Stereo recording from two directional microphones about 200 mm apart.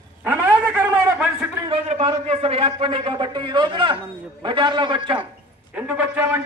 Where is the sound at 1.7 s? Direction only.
30° right (ahead or behind).